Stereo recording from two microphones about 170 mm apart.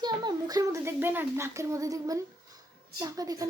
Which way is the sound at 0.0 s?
25° right (ahead or behind).